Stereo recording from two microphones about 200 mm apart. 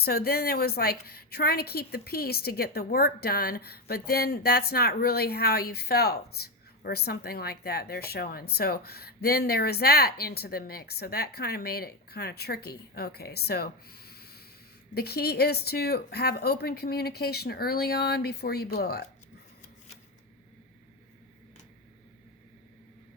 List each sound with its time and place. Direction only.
0.0 s a woman's voice: 50° left (ahead or behind)